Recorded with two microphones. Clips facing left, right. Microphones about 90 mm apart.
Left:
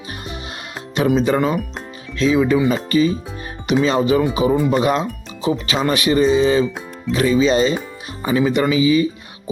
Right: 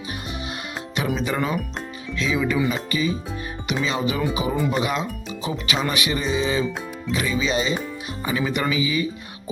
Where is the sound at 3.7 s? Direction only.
40° left (ahead or behind).